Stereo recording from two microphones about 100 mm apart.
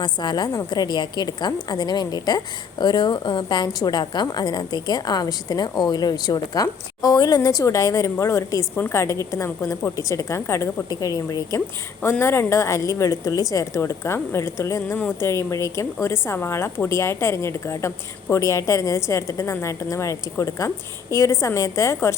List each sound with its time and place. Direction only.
0.0 s a woman's voice: 50° left (ahead or behind)
12.2 s a woman's voice: 25° left (ahead or behind)